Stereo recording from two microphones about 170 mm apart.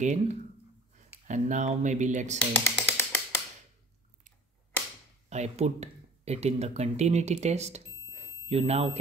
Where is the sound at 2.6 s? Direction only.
15° left (ahead or behind).